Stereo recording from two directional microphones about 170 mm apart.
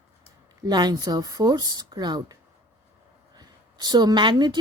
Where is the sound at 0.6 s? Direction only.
25° right (ahead or behind).